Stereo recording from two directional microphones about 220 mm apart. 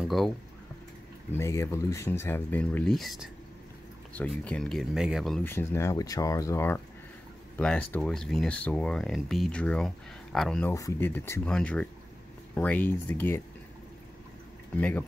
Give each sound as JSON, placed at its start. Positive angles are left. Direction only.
{"t": 1.3, "sound": "speech", "side_deg": 10}
{"t": 10.7, "sound": "speech", "side_deg": 10}
{"t": 14.8, "sound": "speech", "side_deg": 5}